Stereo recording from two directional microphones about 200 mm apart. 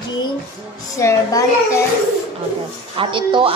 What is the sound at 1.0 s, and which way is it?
Speech, 15° left (ahead or behind).